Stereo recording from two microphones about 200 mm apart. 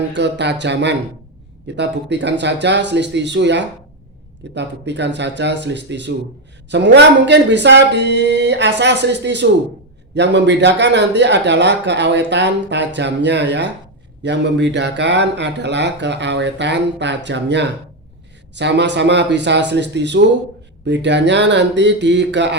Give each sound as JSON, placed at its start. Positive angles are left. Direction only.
{"t": 0.1, "sound": "speech", "side_deg": -60}